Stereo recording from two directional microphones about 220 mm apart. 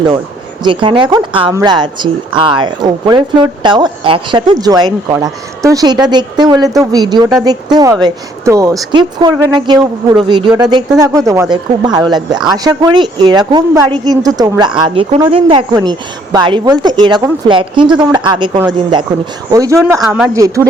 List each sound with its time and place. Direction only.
0.6 s speech: 20° right (ahead or behind); by 20.4 s 5° right (ahead or behind)